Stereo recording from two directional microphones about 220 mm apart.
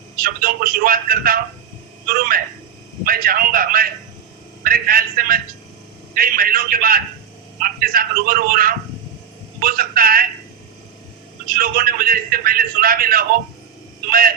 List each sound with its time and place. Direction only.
0.2 s a man's voice: 40° right (ahead or behind)
11.5 s a man's voice: 40° right (ahead or behind)